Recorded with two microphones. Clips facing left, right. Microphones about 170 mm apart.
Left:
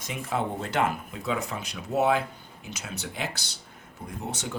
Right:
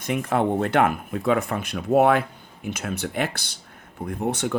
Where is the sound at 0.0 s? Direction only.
60° right (ahead or behind).